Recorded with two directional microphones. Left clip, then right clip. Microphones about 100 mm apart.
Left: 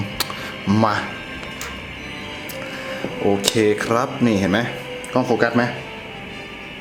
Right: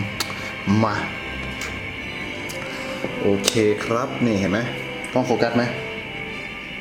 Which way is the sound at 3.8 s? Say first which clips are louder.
Left 3 dB; 15° left (ahead or behind).